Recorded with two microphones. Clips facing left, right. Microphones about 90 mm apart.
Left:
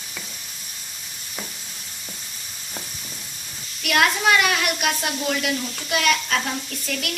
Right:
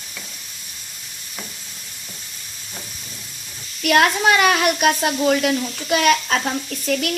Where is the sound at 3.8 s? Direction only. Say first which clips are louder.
Right 4 dB; 30° right (ahead or behind).